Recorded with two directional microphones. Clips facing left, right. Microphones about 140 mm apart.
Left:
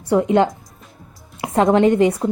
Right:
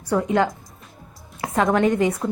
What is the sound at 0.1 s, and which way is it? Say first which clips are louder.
Speech: left 5 dB; 25° left (ahead or behind).